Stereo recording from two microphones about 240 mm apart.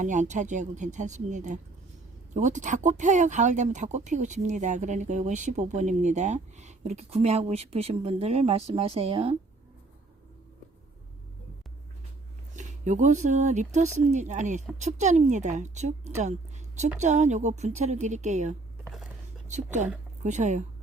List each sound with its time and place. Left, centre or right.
0.0 s speech: right
12.5 s speech: right